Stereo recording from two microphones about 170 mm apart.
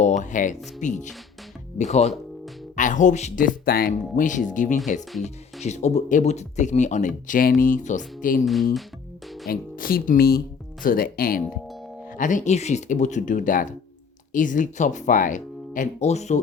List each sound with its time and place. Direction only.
0.2 s speech: 45° left (ahead or behind)
9.5 s speech: 60° left (ahead or behind); by 16.4 s 40° left (ahead or behind)